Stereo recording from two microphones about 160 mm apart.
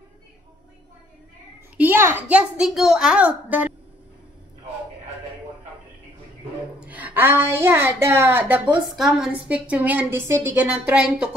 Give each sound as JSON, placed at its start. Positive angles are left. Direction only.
{"t": 1.8, "sound": "a woman's voice", "side_deg": -15}
{"t": 6.8, "sound": "a woman's voice", "side_deg": -10}